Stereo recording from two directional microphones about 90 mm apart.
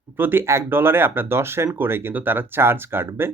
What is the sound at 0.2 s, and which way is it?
Speech, 25° right (ahead or behind).